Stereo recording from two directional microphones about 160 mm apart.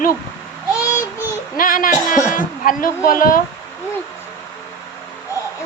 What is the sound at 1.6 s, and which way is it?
A woman's voice, 55° left (ahead or behind).